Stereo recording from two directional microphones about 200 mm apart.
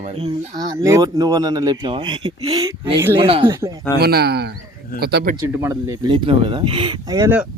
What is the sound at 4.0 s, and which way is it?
Speech, 50° right (ahead or behind).